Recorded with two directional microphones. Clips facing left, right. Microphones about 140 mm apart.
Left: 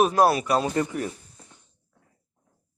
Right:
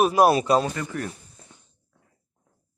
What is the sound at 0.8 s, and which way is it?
Speech, 30° left (ahead or behind).